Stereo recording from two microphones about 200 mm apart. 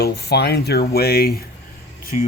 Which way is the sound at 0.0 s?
55° left (ahead or behind).